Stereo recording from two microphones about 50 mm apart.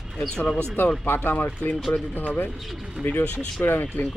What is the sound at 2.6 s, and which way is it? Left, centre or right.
Speech, centre.